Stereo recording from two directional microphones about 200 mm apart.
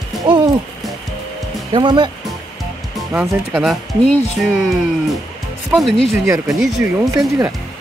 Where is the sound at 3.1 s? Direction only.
5° right (ahead or behind).